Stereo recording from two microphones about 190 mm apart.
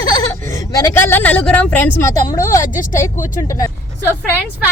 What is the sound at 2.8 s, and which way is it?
Speech, 45° left (ahead or behind).